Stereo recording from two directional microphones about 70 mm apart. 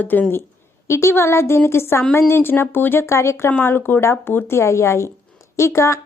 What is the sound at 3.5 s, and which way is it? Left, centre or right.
Speech, left.